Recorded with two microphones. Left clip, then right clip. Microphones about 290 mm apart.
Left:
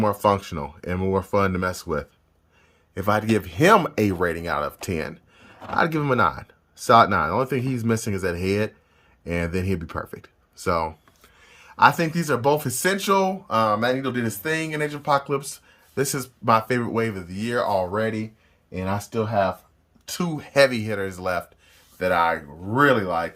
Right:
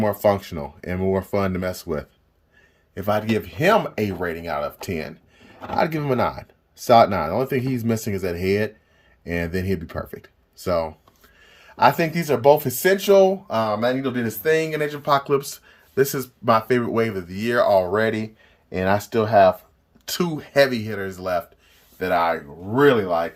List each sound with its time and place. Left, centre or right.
0.0 s speech: centre